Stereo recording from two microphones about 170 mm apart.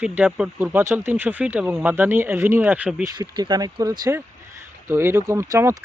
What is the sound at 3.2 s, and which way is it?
Speech, 25° right (ahead or behind).